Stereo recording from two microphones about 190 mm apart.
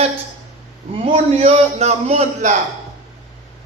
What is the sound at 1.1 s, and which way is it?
A man's voice, 35° right (ahead or behind).